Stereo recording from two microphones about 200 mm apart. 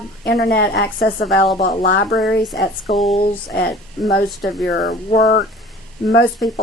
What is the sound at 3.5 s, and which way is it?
Speech, 50° left (ahead or behind).